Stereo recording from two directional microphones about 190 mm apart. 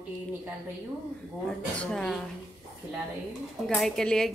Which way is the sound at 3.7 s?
Centre (ahead or behind).